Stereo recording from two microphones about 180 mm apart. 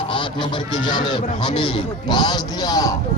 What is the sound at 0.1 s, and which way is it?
Speech, 25° left (ahead or behind).